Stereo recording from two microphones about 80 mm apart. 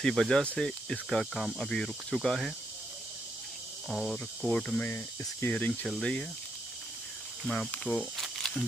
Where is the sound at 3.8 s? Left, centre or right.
Centre.